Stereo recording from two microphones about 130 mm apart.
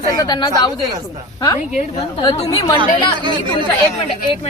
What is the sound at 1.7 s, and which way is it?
Speech, 60° left (ahead or behind).